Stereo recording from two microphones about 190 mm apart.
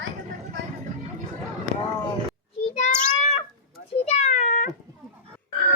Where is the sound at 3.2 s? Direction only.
35° left (ahead or behind).